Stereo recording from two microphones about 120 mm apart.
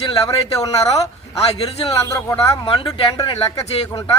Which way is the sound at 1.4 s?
55° left (ahead or behind).